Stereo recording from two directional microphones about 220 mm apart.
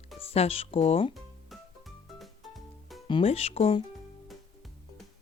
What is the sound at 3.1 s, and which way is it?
Speech, 25° left (ahead or behind).